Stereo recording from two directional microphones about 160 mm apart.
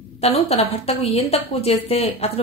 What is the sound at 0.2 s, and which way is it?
A woman's voice, 40° left (ahead or behind).